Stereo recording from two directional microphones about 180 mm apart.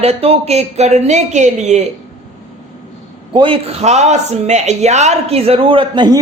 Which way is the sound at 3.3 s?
30° right (ahead or behind).